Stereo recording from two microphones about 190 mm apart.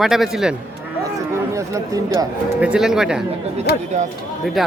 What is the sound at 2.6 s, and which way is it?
Speech, 5° right (ahead or behind).